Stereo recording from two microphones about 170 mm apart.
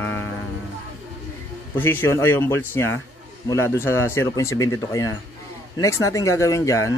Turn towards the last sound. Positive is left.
turn(degrees=20)  # may be behind; listen again after turning